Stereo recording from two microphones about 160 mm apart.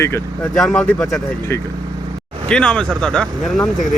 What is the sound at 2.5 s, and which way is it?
Speech, 5° left (ahead or behind).